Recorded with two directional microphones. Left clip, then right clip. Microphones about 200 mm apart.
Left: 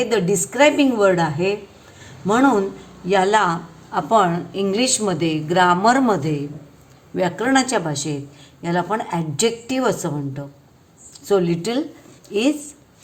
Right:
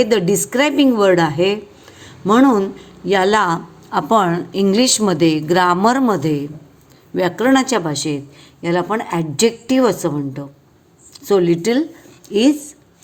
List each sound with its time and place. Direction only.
0.0 s a woman's voice: 25° right (ahead or behind)